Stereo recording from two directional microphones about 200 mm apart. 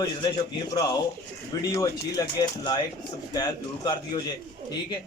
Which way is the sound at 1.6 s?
20° left (ahead or behind).